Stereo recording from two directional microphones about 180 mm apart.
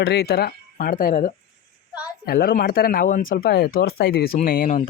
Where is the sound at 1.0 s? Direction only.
50° left (ahead or behind).